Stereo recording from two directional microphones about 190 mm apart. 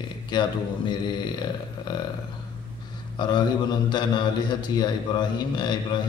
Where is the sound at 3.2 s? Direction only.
20° left (ahead or behind).